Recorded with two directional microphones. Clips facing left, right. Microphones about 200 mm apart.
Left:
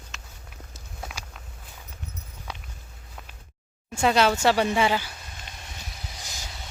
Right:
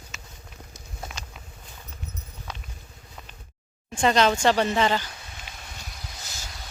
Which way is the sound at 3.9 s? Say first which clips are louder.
Even; 5° left (ahead or behind).